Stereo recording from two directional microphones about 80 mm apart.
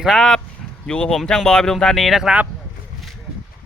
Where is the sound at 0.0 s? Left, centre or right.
Centre.